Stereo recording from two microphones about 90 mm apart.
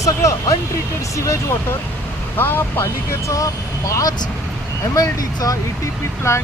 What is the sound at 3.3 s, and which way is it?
Speech, 40° left (ahead or behind).